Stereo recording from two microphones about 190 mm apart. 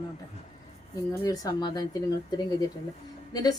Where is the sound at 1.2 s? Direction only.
20° left (ahead or behind).